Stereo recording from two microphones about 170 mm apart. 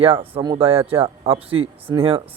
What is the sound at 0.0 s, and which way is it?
Speech, 35° right (ahead or behind).